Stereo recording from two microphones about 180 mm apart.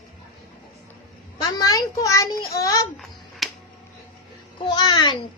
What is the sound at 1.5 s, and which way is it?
A woman's voice, 20° left (ahead or behind).